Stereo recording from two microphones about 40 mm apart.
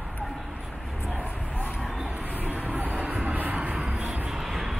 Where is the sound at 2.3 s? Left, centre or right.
Right.